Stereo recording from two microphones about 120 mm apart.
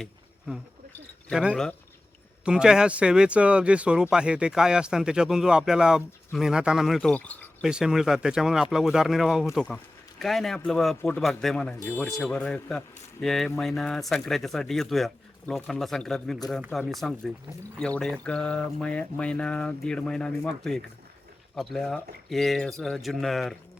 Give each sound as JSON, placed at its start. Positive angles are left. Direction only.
{"t": 0.0, "sound": "a sound", "side_deg": -5}
{"t": 1.3, "sound": "speech", "side_deg": -5}
{"t": 7.1, "sound": "speech", "side_deg": 15}
{"t": 7.6, "sound": "speech", "side_deg": -5}